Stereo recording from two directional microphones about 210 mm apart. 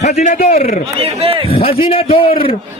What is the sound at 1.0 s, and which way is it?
Speech, 25° right (ahead or behind).